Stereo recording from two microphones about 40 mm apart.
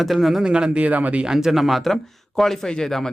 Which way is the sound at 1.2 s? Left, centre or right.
Centre.